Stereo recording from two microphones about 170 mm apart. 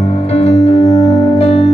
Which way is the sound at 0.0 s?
40° left (ahead or behind).